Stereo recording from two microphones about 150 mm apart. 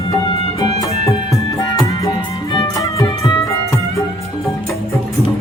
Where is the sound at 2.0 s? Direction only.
25° left (ahead or behind).